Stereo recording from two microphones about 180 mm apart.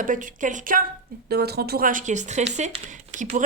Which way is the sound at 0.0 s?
45° right (ahead or behind).